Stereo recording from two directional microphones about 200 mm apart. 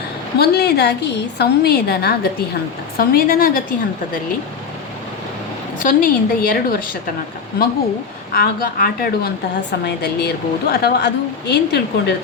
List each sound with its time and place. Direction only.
0.3 s a woman's voice: 55° left (ahead or behind)
5.8 s a woman's voice: 45° left (ahead or behind)
8.3 s a woman's voice: 50° left (ahead or behind)